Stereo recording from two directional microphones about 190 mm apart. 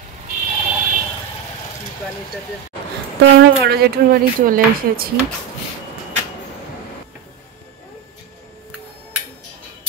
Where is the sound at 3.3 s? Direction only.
55° right (ahead or behind).